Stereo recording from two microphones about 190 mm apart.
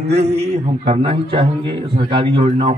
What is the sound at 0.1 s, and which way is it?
A man's voice, 35° right (ahead or behind).